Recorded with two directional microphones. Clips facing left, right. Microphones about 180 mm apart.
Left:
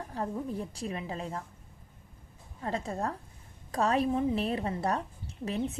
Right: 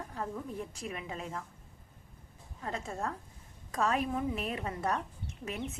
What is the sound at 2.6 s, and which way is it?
A woman's voice, 35° left (ahead or behind).